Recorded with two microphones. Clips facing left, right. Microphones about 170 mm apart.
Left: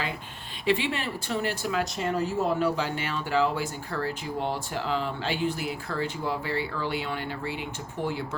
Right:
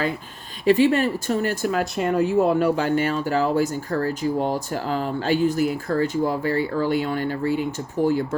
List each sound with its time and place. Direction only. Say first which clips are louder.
0.6 s speech: right 10 dB; 45° right (ahead or behind)